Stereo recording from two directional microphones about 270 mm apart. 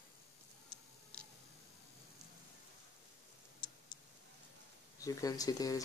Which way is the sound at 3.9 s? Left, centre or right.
Left.